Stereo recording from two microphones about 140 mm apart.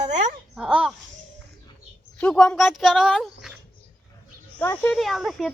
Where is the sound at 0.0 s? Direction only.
60° right (ahead or behind).